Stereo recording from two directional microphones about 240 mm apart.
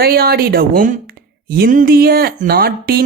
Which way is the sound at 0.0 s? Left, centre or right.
Right.